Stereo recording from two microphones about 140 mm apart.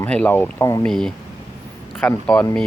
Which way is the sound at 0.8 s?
5° left (ahead or behind).